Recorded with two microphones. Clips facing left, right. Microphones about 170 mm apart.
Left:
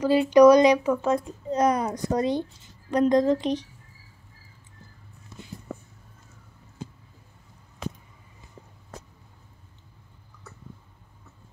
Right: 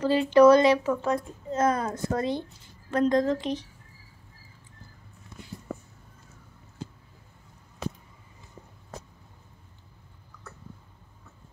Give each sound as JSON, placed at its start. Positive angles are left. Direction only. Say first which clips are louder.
{"t": 0.0, "sound": "a woman's voice", "louder": "left 2 dB", "side_deg": 15}